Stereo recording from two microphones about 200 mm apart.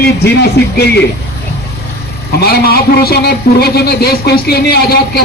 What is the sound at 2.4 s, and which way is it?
A man's voice, 50° left (ahead or behind).